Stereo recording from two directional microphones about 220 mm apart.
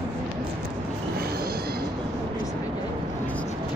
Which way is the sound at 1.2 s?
45° right (ahead or behind).